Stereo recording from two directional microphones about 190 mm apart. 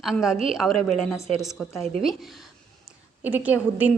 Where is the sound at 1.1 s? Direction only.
15° left (ahead or behind).